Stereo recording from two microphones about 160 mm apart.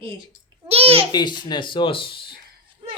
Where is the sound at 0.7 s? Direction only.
35° right (ahead or behind).